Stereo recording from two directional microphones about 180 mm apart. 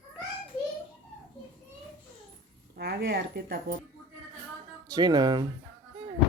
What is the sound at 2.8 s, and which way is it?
Speech, 65° right (ahead or behind).